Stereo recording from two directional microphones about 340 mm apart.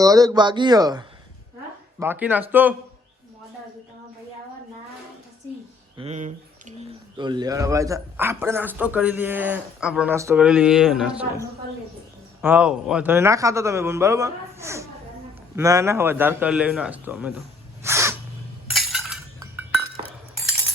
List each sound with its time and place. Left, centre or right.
0.0 s a man's voice: centre
6.0 s a sound: centre
7.2 s speech: centre
12.4 s a man's voice: centre
17.8 s sneeze: centre
18.7 s chink: centre